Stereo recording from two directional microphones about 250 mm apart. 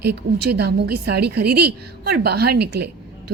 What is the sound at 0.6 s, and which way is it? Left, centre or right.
A woman's voice, right.